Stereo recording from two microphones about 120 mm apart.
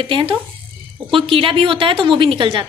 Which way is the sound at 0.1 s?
45° right (ahead or behind).